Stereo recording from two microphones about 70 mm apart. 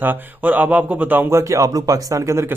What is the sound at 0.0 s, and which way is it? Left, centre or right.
Speech, right.